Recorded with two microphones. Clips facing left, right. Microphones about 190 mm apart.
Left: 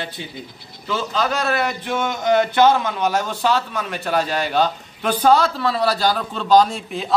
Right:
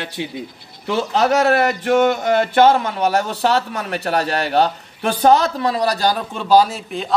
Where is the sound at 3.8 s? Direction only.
70° right (ahead or behind).